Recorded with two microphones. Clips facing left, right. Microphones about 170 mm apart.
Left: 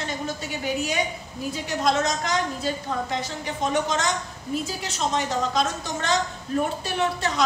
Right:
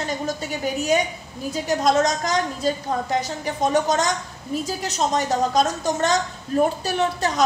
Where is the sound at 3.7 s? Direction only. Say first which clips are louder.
Right 3 dB; 40° right (ahead or behind).